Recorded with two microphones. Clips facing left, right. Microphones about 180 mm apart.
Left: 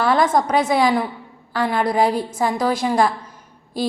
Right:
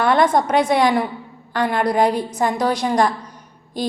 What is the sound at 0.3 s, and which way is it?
A woman's voice, centre (ahead or behind).